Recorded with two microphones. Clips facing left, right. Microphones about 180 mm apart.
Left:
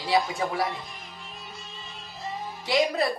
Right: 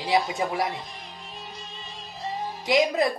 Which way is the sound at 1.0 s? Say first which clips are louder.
Right 2 dB; 35° right (ahead or behind).